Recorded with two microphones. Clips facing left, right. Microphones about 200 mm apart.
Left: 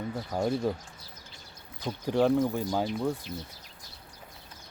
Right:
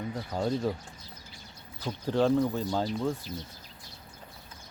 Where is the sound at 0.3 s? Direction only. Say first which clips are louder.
Left 1 dB; 15° left (ahead or behind).